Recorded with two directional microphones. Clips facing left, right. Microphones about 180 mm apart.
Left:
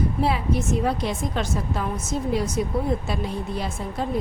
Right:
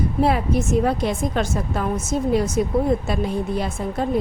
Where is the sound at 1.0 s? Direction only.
50° right (ahead or behind).